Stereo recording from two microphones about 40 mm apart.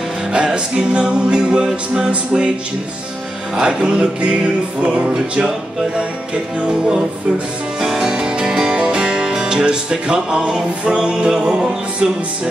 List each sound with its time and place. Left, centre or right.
0.3 s music: centre
3.6 s music: right
6.8 s music: centre